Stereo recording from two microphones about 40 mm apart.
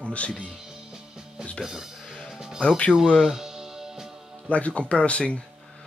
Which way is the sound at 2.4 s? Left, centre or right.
Centre.